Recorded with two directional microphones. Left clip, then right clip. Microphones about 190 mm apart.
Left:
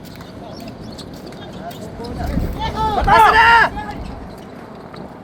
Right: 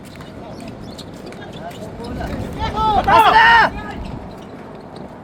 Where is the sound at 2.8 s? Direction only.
55° right (ahead or behind).